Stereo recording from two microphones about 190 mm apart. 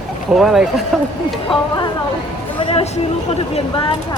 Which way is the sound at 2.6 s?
25° left (ahead or behind).